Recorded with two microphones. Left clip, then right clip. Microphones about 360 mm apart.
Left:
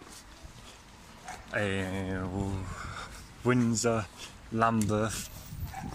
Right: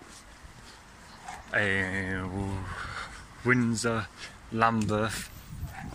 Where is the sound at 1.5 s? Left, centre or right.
Centre.